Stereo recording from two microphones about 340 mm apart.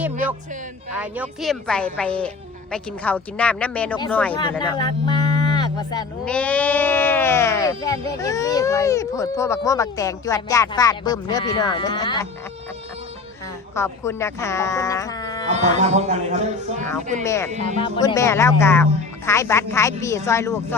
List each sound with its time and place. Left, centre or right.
0.9 s speech: centre
13.7 s speech: centre
15.4 s speech: centre
17.2 s speech: centre